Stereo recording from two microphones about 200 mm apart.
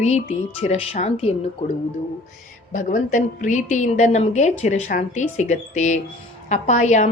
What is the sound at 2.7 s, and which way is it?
A woman's voice, 40° left (ahead or behind).